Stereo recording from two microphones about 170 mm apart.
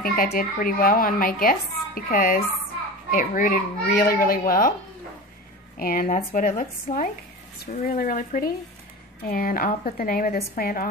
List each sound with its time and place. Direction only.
0.0 s a woman's voice: 55° left (ahead or behind)
5.8 s a woman's voice: 55° left (ahead or behind)